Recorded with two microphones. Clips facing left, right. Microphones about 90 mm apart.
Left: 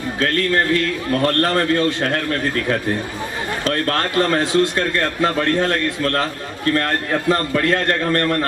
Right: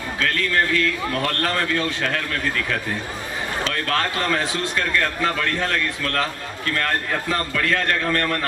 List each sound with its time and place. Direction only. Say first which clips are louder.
0.2 s a man's voice: left 3 dB; 35° left (ahead or behind)